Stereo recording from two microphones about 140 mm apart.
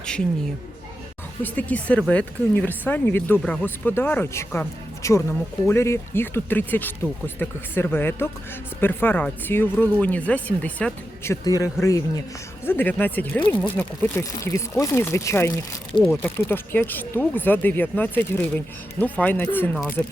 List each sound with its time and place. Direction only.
1.4 s speech: 10° left (ahead or behind)